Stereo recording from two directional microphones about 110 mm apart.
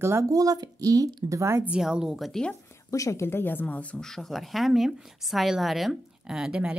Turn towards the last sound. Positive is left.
turn(degrees=-10)  # may be behind; listen again after turning